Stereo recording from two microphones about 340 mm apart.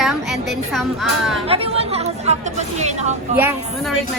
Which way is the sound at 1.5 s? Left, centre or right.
Centre.